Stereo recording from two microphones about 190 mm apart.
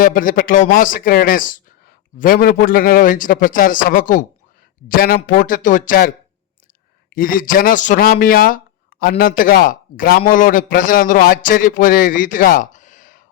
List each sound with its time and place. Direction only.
0.0 s speech: 45° left (ahead or behind)
7.1 s speech: 50° left (ahead or behind)